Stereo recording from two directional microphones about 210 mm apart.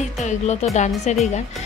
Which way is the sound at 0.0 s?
35° left (ahead or behind).